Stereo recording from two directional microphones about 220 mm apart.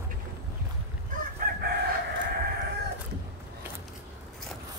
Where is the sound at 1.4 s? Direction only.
40° right (ahead or behind).